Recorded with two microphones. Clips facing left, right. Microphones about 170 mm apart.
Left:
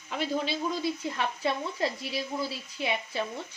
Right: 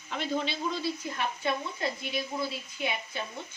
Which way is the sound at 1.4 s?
30° left (ahead or behind).